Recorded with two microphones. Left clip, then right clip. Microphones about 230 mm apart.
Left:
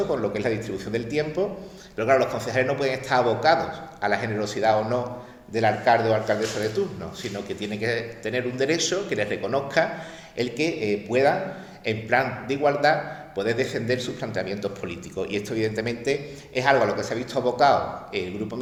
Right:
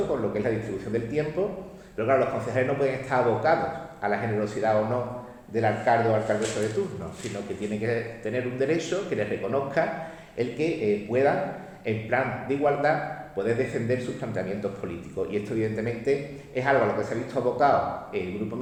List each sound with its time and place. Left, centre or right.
0.1 s a man's voice: left
7.8 s a man's voice: left